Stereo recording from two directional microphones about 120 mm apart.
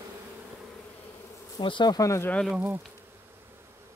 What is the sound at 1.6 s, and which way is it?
Speech, 40° left (ahead or behind).